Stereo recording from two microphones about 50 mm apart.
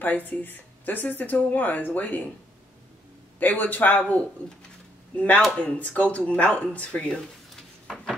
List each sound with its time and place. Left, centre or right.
0.0 s speech: left
3.3 s speech: left
4.0 s speech: left